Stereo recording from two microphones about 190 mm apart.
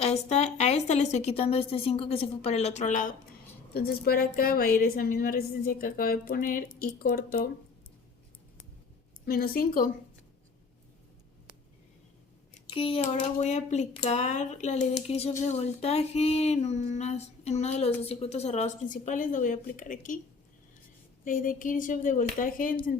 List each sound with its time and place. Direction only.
0.0 s a woman's voice: 35° left (ahead or behind)
9.2 s a woman's voice: 50° left (ahead or behind)
12.7 s speech: 30° left (ahead or behind); by 20.1 s 45° left (ahead or behind)
21.2 s a woman's voice: 45° left (ahead or behind)